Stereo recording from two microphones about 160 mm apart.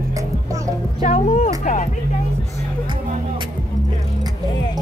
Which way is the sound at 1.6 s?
50° left (ahead or behind).